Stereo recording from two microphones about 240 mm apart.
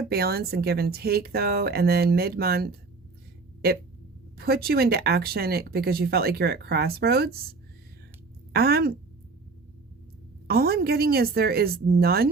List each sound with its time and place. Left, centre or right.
0.1 s speech: right
4.4 s speech: right
8.5 s speech: right
10.4 s speech: right